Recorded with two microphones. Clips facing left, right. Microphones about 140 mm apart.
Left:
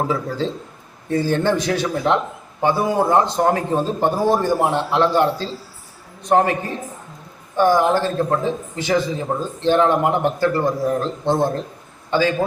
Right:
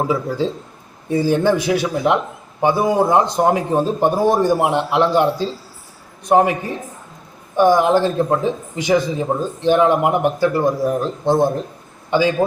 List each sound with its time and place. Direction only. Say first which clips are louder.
0.0 s a man's voice: right 2 dB; 10° right (ahead or behind)